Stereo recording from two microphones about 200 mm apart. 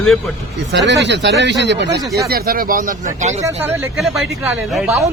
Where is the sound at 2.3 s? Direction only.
45° right (ahead or behind).